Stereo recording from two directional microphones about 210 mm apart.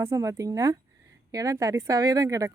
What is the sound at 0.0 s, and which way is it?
A woman's voice, 15° right (ahead or behind).